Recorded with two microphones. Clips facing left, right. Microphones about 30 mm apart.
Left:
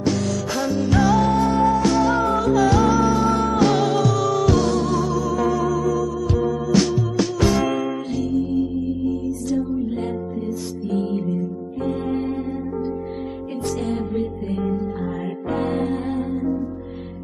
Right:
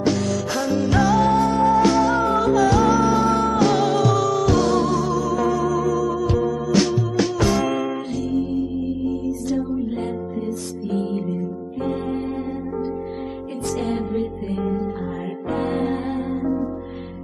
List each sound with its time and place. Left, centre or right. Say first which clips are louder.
0.0 s music: right 1 dB; centre
8.3 s music: left 1 dB; centre
10.9 s music: left 1 dB; centre
13.8 s music: even; centre